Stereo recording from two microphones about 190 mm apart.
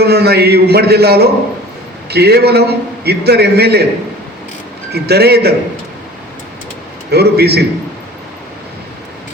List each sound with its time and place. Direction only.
0.0 s a man's voice: 60° right (ahead or behind)
4.9 s a man's voice: 60° right (ahead or behind)
7.1 s a man's voice: 60° right (ahead or behind)